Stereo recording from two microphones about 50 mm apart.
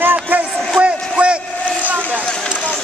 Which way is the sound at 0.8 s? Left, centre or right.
Right.